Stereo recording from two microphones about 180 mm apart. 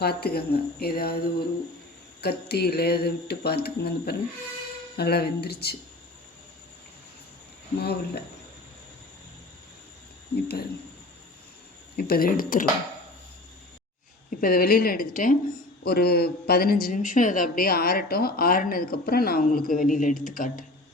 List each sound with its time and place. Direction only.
0.0 s speech: 60° left (ahead or behind)
7.8 s speech: 65° left (ahead or behind)
11.9 s speech: 55° left (ahead or behind)
14.3 s speech: 55° left (ahead or behind)
15.8 s speech: 60° left (ahead or behind)